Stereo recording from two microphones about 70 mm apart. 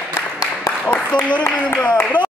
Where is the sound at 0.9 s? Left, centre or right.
Centre.